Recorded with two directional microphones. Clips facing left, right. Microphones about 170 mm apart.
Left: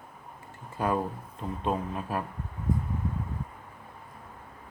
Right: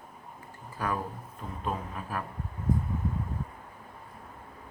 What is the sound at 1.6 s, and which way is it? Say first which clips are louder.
Speech: left 4 dB; 25° left (ahead or behind).